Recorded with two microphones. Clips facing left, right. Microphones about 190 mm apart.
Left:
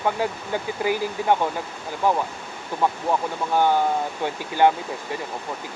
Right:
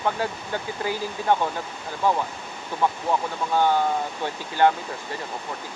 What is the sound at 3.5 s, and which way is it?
Speech, 15° left (ahead or behind).